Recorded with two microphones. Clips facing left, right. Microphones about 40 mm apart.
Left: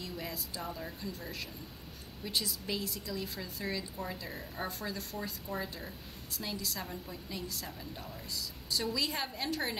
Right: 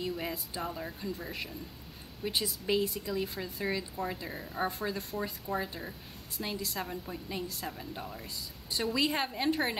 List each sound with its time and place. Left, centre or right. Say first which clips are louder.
0.0 s a woman's voice: right 5 dB; right